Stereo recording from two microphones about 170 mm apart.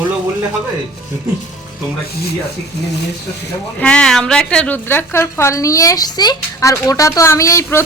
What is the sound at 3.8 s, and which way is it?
A woman's voice, 5° left (ahead or behind).